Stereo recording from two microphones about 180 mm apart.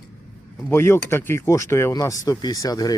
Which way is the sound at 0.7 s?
15° left (ahead or behind).